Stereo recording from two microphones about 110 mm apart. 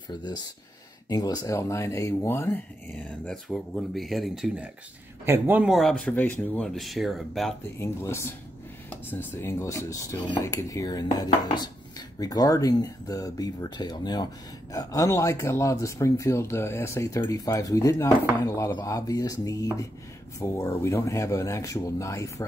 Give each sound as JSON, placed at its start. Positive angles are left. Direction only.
{"t": 1.0, "sound": "speech", "side_deg": 35}
{"t": 2.9, "sound": "speech", "side_deg": 0}
{"t": 5.2, "sound": "speech", "side_deg": -20}
{"t": 5.7, "sound": "speech", "side_deg": 0}
{"t": 5.9, "sound": "speech", "side_deg": 15}
{"t": 7.8, "sound": "speech", "side_deg": 25}
{"t": 10.1, "sound": "speech", "side_deg": 45}
{"t": 10.4, "sound": "speech", "side_deg": 30}